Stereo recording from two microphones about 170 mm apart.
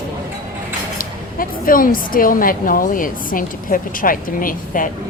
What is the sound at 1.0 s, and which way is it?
A woman's voice, 55° left (ahead or behind).